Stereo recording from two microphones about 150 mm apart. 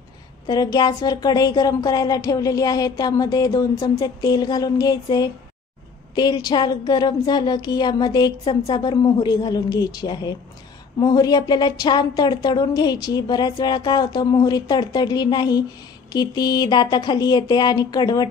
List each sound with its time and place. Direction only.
0.5 s a woman's voice: 25° left (ahead or behind)